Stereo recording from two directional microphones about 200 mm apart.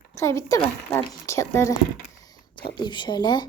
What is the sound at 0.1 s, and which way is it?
Speech, 15° left (ahead or behind).